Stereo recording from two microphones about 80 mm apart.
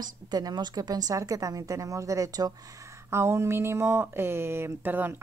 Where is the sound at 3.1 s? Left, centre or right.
Right.